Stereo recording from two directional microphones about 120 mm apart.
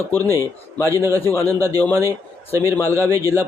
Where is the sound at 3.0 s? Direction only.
20° left (ahead or behind).